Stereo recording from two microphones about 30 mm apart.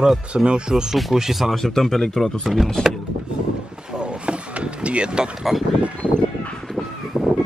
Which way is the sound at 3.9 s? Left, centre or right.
Right.